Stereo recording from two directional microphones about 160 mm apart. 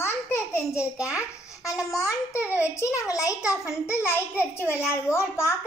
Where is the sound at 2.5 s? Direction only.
15° left (ahead or behind).